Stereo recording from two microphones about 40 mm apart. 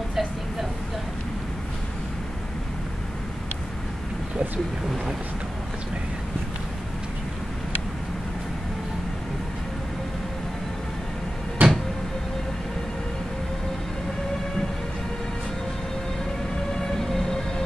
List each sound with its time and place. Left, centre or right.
0.1 s vehicle: centre
11.6 s a sound: right
16.7 s vehicle: centre